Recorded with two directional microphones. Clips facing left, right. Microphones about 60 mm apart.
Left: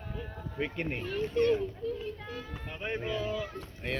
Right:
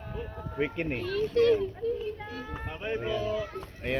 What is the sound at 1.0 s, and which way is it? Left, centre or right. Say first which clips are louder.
Speech: right 4 dB; right.